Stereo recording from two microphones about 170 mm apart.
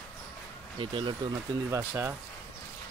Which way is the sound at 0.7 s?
30° right (ahead or behind).